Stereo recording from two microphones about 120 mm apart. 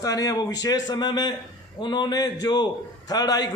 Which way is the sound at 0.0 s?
30° left (ahead or behind).